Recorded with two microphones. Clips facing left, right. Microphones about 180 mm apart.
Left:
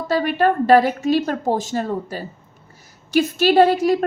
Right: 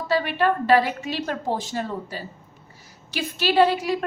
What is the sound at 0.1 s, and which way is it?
A woman's voice, 45° left (ahead or behind).